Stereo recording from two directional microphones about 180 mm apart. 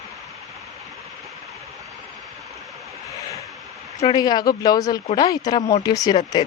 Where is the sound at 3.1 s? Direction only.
15° left (ahead or behind).